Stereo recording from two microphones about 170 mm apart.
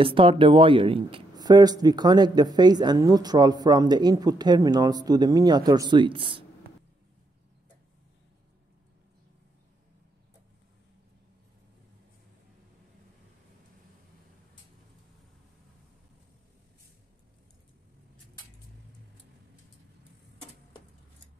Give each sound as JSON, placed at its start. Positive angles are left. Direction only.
{"t": 0.0, "sound": "speech", "side_deg": -30}